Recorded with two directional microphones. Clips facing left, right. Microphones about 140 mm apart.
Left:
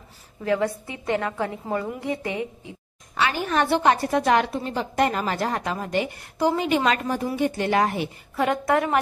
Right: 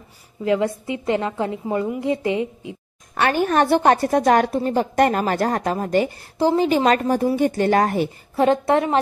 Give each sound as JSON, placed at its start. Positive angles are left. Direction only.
{"t": 0.4, "sound": "a woman's voice", "side_deg": -20}
{"t": 3.2, "sound": "a woman's voice", "side_deg": -50}
{"t": 6.3, "sound": "a woman's voice", "side_deg": -30}
{"t": 8.4, "sound": "a woman's voice", "side_deg": -30}